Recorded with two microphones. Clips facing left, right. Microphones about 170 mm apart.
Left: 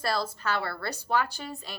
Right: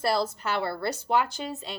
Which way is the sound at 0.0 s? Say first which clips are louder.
Right 3 dB; 25° right (ahead or behind).